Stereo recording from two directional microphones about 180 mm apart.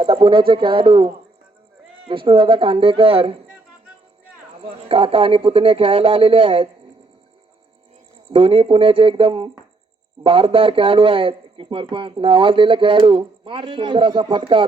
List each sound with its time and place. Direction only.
0.0 s a man's voice: 30° right (ahead or behind)
4.6 s speech: 30° right (ahead or behind)
8.3 s a man's voice: 30° right (ahead or behind)